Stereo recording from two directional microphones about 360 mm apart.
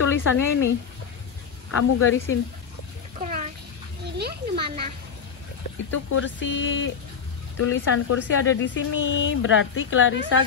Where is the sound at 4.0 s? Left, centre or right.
Right.